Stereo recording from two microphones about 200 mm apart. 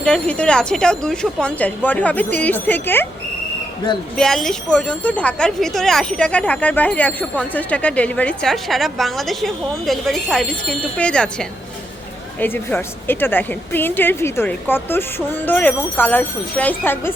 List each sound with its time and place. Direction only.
0.0 s a woman's voice: 5° left (ahead or behind)
4.2 s a woman's voice: centre (ahead or behind)